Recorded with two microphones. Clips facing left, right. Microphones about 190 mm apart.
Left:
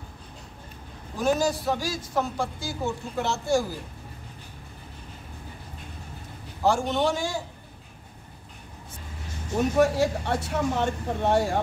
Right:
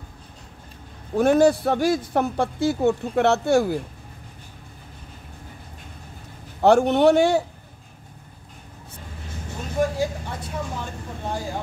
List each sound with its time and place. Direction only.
1.1 s a man's voice: 60° right (ahead or behind)
6.6 s a man's voice: 65° right (ahead or behind)
9.6 s speech: 70° left (ahead or behind)